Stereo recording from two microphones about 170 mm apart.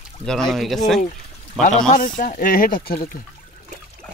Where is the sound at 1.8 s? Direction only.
50° left (ahead or behind).